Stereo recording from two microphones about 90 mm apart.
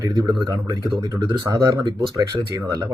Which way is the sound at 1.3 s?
35° right (ahead or behind).